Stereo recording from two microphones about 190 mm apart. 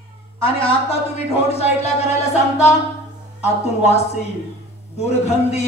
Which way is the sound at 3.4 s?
35° left (ahead or behind).